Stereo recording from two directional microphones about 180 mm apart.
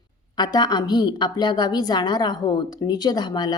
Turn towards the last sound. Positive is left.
turn(degrees=25)  # may be behind; listen again after turning